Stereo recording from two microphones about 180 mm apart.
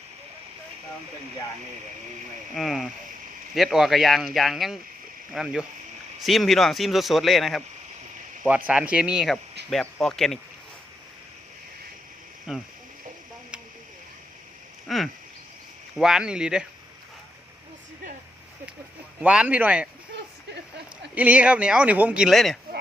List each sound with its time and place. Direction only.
2.6 s speech: centre (ahead or behind)
12.5 s speech: 5° right (ahead or behind)
14.8 s speech: centre (ahead or behind)
19.2 s a man's voice: 5° right (ahead or behind)
21.2 s a man's voice: 10° right (ahead or behind)